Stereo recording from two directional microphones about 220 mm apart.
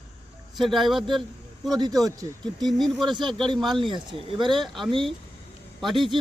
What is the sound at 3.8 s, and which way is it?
Speech, 25° right (ahead or behind).